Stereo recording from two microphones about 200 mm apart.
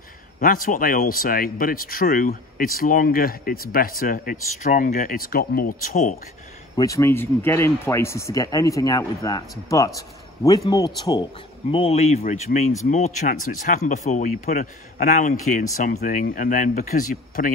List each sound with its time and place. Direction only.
0.4 s speech: 45° left (ahead or behind)
6.8 s speech: 15° left (ahead or behind); by 17.5 s 40° left (ahead or behind)